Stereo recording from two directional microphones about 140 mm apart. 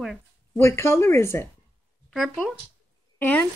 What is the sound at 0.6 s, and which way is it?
Speech, 20° left (ahead or behind).